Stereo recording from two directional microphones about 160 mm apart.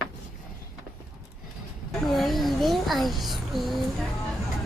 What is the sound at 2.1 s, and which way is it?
Child singing, centre (ahead or behind).